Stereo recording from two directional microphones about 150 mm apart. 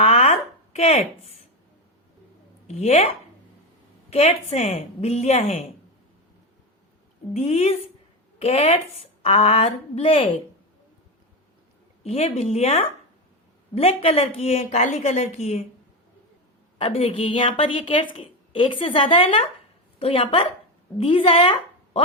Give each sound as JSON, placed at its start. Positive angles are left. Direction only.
{"t": 0.0, "sound": "a sound", "side_deg": 45}
{"t": 2.6, "sound": "a woman's voice", "side_deg": 45}
{"t": 7.3, "sound": "a woman's voice", "side_deg": 50}
{"t": 12.0, "sound": "a woman's voice", "side_deg": 45}
{"t": 16.7, "sound": "a woman's voice", "side_deg": 40}